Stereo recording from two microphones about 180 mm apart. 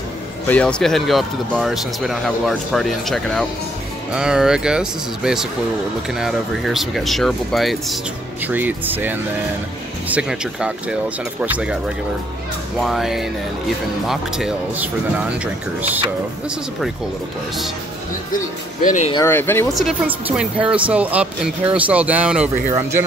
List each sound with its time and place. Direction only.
0.5 s speech: 5° left (ahead or behind)
12.8 s speech: centre (ahead or behind)
18.8 s speech: 45° left (ahead or behind)
19.2 s speech: 10° left (ahead or behind)
19.7 s speech: centre (ahead or behind)